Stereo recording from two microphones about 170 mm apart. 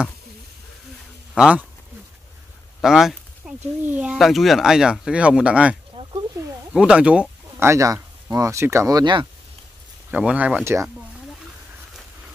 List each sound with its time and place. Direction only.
1.3 s speech: 5° right (ahead or behind)
2.8 s speech: centre (ahead or behind); by 9.3 s 25° right (ahead or behind)
10.1 s speech: 10° right (ahead or behind)